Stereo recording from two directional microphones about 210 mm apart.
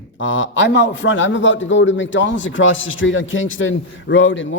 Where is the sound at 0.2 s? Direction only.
65° left (ahead or behind).